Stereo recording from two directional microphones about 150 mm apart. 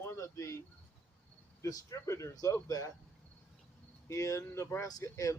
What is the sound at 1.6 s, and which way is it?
Speech, 20° left (ahead or behind).